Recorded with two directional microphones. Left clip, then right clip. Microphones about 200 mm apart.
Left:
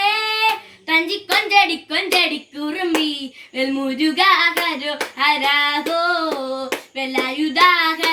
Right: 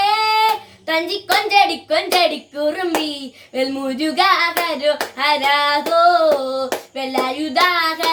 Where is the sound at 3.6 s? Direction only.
15° right (ahead or behind).